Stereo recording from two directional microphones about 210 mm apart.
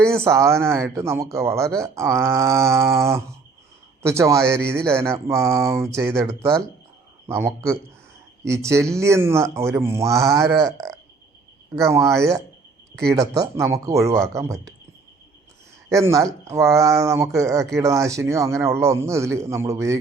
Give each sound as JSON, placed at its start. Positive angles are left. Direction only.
{"t": 0.0, "sound": "a man's voice", "side_deg": -10}
{"t": 13.6, "sound": "a man's voice", "side_deg": -15}
{"t": 15.9, "sound": "a man's voice", "side_deg": -15}